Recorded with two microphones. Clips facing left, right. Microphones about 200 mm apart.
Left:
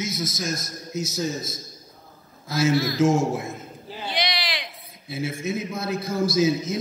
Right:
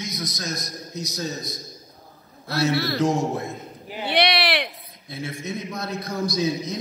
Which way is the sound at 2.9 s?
Centre (ahead or behind).